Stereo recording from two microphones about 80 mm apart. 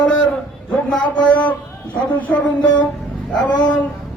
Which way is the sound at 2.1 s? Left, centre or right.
Centre.